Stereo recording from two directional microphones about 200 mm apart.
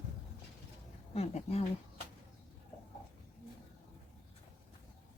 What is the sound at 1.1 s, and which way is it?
Speech, 30° left (ahead or behind).